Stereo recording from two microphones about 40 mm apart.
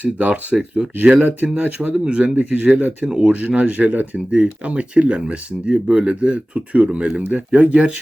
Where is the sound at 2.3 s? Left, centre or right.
Right.